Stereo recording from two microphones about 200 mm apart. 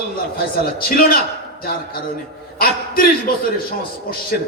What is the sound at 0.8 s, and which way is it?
Speech, 45° left (ahead or behind).